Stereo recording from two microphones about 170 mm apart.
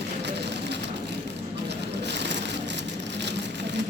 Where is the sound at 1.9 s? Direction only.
90° right.